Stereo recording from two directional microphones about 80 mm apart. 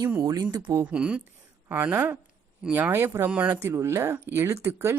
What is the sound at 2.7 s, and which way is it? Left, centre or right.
Speech, right.